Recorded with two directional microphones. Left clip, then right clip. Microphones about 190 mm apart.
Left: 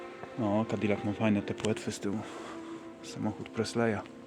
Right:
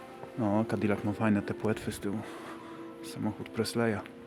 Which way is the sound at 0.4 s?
5° right (ahead or behind).